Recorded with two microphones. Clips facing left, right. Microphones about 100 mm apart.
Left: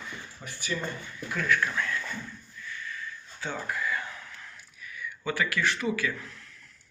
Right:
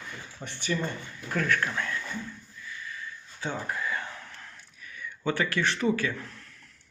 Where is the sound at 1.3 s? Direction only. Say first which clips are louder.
Even; 45° right (ahead or behind).